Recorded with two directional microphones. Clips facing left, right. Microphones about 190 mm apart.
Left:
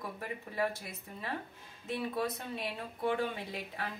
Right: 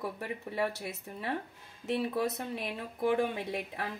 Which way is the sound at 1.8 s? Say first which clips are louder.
Right 4 dB; 75° right (ahead or behind).